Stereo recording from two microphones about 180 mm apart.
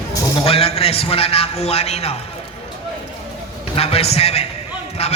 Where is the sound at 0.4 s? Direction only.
35° left (ahead or behind).